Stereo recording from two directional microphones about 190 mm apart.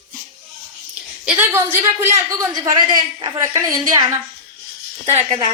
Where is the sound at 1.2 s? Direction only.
10° right (ahead or behind).